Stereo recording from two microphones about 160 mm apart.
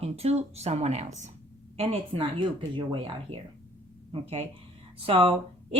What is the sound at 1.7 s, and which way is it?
Speech, 35° right (ahead or behind).